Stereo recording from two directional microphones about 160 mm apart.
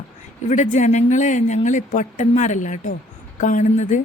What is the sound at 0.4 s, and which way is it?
Speech, 50° left (ahead or behind).